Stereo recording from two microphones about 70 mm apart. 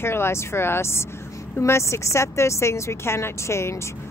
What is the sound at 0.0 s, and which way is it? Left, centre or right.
A woman's voice, left.